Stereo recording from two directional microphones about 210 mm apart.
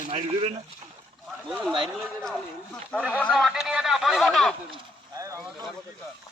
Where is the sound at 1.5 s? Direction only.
Centre (ahead or behind).